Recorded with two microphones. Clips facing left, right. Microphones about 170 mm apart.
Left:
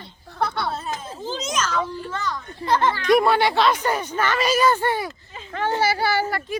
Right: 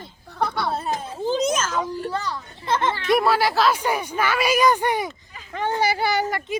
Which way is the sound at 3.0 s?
Centre (ahead or behind).